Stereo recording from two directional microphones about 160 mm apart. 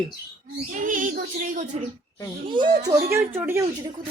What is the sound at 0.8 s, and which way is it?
Speech, 55° right (ahead or behind).